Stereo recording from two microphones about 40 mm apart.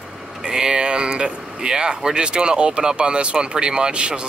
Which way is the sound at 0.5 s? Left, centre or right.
Centre.